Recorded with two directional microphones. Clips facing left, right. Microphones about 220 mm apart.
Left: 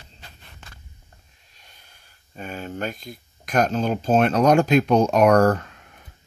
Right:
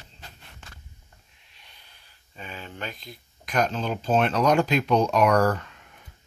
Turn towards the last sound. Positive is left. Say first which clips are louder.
# left 5 dB
turn(degrees=45)  # may be behind; listen again after turning